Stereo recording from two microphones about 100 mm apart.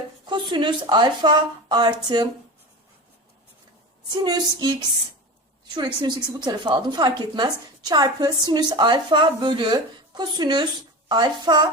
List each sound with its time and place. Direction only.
0.3 s a woman's voice: 50° right (ahead or behind)
4.1 s a woman's voice: 40° right (ahead or behind)